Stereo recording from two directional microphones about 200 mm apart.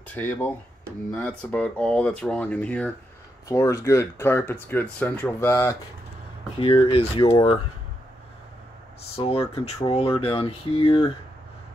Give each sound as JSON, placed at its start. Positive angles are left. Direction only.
{"t": 0.1, "sound": "speech", "side_deg": 10}
{"t": 6.6, "sound": "speech", "side_deg": 30}
{"t": 9.1, "sound": "speech", "side_deg": 30}